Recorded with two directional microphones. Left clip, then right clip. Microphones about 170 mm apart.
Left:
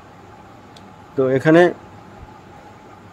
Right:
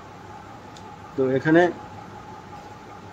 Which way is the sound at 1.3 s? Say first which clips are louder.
Left 6 dB; 80° left.